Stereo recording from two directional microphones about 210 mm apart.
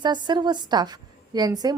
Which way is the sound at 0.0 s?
20° right (ahead or behind).